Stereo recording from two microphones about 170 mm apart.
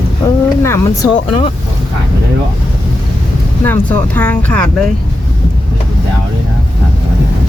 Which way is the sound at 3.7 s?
10° left (ahead or behind).